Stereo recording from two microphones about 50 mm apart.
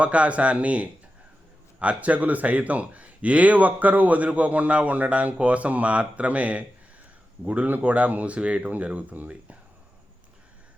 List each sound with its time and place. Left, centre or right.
0.0 s speech: right